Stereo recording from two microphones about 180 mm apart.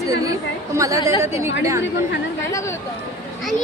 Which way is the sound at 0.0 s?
20° right (ahead or behind).